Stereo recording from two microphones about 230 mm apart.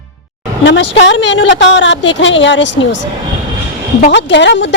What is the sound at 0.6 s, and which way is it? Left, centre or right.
Speech, left.